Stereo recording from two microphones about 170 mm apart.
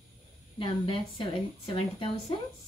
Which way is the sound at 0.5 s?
30° left (ahead or behind).